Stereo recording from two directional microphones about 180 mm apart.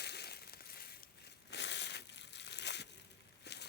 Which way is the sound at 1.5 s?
75° left (ahead or behind).